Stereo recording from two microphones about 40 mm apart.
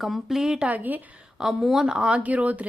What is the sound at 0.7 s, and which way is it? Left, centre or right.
Speech, right.